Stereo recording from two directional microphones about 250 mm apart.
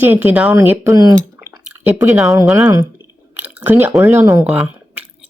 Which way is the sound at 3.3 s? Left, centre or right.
Centre.